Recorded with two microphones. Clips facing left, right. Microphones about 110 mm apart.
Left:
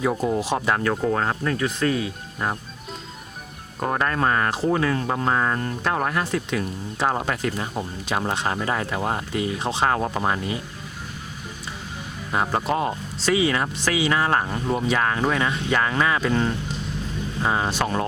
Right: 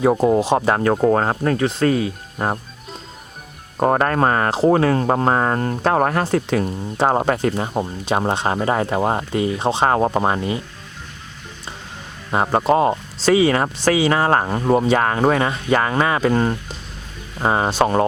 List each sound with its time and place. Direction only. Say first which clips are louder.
0.0 s speech: right 7 dB; 35° right (ahead or behind)
3.8 s speech: right 7 dB; 40° right (ahead or behind)
12.3 s speech: right 6 dB; 35° right (ahead or behind)
17.4 s speech: right 6 dB; 35° right (ahead or behind)